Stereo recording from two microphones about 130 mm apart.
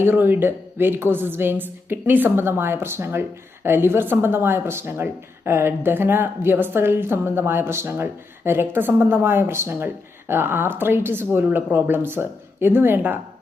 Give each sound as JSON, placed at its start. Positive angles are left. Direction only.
{"t": 0.0, "sound": "a woman's voice", "side_deg": -15}